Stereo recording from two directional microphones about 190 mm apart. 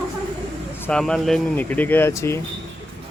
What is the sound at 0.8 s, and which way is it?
Speech, 5° left (ahead or behind).